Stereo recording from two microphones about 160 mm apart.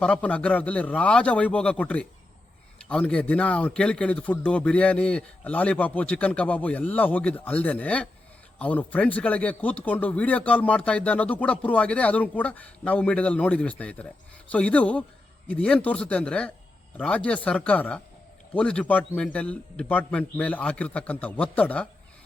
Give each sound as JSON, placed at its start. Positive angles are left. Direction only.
{"t": 0.0, "sound": "speech", "side_deg": 5}